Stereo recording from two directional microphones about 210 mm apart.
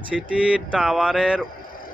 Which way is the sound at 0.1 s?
Centre (ahead or behind).